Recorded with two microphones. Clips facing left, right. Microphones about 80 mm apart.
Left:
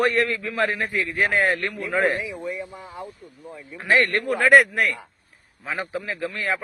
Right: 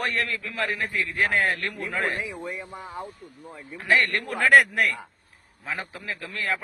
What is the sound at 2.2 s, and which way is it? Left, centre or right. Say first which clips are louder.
Speech: left 3 dB; right.